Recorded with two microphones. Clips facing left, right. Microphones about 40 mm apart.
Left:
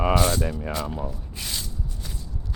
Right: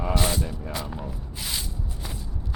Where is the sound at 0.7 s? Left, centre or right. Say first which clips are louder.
Left 3 dB; centre.